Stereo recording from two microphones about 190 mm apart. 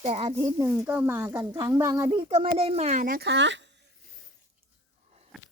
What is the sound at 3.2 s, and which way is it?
Speech, 70° right (ahead or behind).